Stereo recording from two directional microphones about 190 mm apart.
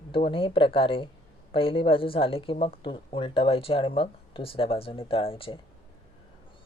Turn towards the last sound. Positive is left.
turn(degrees=30)  # may be behind; listen again after turning